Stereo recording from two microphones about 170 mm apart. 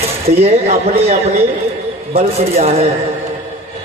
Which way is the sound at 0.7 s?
35° right (ahead or behind).